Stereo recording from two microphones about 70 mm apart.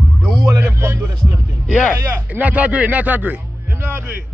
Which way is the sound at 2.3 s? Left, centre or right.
Right.